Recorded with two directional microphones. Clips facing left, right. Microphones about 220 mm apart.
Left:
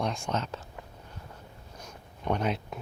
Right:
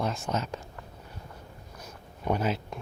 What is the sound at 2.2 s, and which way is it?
Speech, 5° right (ahead or behind).